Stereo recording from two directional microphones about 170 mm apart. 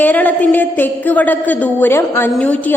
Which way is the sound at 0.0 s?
10° left (ahead or behind).